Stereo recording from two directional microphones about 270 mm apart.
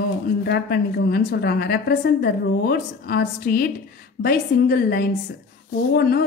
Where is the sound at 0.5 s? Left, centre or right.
Left.